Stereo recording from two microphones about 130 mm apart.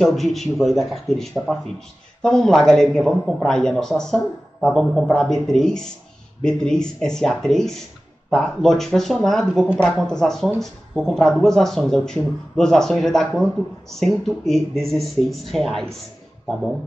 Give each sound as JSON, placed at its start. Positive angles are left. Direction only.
{"t": 0.0, "sound": "speech", "side_deg": 0}